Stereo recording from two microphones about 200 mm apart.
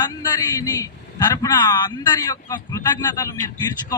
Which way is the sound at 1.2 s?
20° left (ahead or behind).